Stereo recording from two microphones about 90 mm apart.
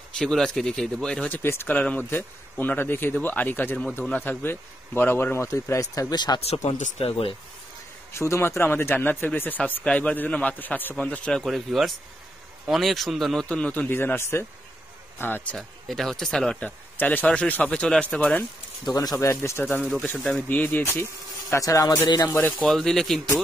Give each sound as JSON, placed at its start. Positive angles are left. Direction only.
{"t": 0.1, "sound": "speech", "side_deg": 5}
{"t": 1.3, "sound": "speech", "side_deg": 25}
{"t": 1.8, "sound": "speech", "side_deg": 15}
{"t": 7.1, "sound": "speech", "side_deg": 90}
{"t": 8.1, "sound": "speech", "side_deg": 30}
{"t": 11.4, "sound": "speech", "side_deg": 0}
{"t": 13.5, "sound": "speech", "side_deg": 15}
{"t": 15.5, "sound": "speech", "side_deg": 5}
{"t": 18.9, "sound": "speech", "side_deg": 45}
{"t": 19.1, "sound": "speech", "side_deg": 30}
{"t": 19.8, "sound": "speech", "side_deg": 5}
{"t": 20.4, "sound": "speech", "side_deg": 20}
{"t": 22.7, "sound": "speech", "side_deg": 5}